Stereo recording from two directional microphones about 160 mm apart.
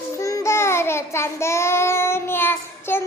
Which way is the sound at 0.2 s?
20° left (ahead or behind).